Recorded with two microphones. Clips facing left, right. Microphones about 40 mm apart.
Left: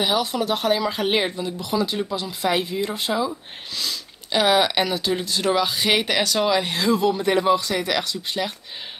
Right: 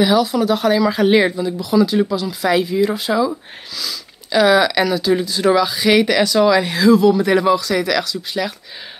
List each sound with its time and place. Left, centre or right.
0.0 s speech: centre
5.1 s speech: centre